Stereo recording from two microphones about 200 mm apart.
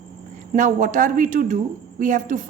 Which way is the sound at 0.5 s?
40° right (ahead or behind).